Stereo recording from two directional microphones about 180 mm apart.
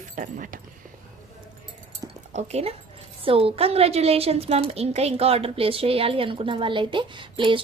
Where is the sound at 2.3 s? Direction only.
40° right (ahead or behind).